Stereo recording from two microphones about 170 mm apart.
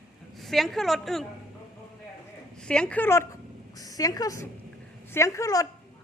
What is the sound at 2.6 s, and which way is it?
A woman's voice, 5° left (ahead or behind).